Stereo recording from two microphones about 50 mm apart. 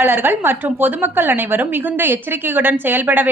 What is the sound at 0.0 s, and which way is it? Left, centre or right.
A woman's voice, right.